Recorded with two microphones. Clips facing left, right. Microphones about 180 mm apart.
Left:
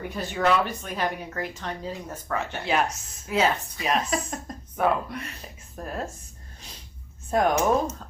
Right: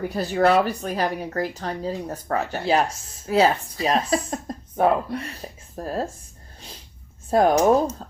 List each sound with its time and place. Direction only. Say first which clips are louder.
0.1 s speech: right 4 dB; 40° right (ahead or behind)
7.3 s speech: right 5 dB; 35° right (ahead or behind)